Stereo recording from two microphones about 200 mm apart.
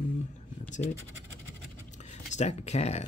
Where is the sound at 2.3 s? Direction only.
35° left (ahead or behind).